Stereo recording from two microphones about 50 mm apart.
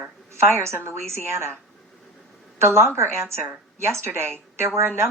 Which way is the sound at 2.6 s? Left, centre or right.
Right.